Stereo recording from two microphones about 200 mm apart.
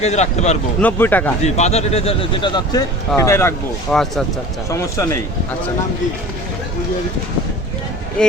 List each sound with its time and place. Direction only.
0.0 s speech: 35° left (ahead or behind)
0.8 s speech: 10° left (ahead or behind)
1.5 s speech: 35° left (ahead or behind); by 3.5 s 15° left (ahead or behind)
3.9 s speech: centre (ahead or behind)
4.7 s speech: 15° left (ahead or behind)
8.2 s speech: 5° left (ahead or behind)